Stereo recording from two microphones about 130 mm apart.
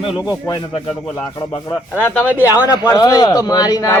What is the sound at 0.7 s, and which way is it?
Speech, 40° left (ahead or behind).